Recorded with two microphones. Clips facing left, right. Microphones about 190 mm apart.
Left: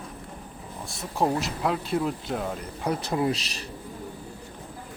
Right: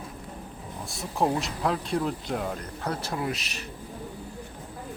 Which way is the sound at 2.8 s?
15° left (ahead or behind).